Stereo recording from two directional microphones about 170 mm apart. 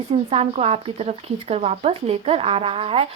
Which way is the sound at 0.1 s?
35° right (ahead or behind).